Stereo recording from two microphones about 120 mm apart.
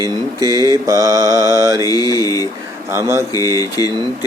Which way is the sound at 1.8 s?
30° left (ahead or behind).